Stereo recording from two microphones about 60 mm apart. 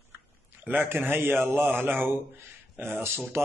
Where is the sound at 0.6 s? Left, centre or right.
Right.